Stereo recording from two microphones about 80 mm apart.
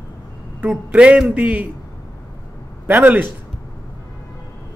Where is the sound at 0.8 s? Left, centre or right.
Centre.